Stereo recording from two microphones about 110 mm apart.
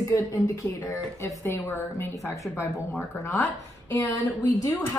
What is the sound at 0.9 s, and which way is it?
Speech, 25° left (ahead or behind).